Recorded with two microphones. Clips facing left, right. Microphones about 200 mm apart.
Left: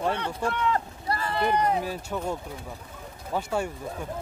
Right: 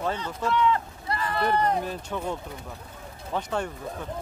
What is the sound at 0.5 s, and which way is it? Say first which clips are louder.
Speech: right 5 dB; 50° left (ahead or behind).